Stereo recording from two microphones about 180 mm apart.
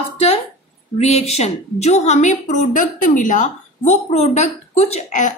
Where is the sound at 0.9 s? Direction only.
35° left (ahead or behind).